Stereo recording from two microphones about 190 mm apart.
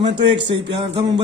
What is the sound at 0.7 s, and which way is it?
Music, 30° right (ahead or behind).